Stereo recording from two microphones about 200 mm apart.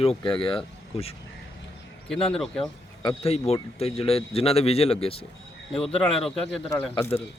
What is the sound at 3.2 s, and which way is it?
Speech, 30° left (ahead or behind).